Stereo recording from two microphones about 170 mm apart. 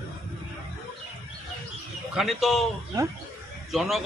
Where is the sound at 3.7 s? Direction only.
Centre (ahead or behind).